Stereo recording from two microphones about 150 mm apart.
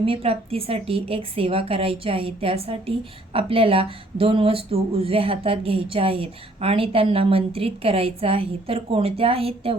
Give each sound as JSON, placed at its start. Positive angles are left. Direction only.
{"t": 0.0, "sound": "a woman's voice", "side_deg": -40}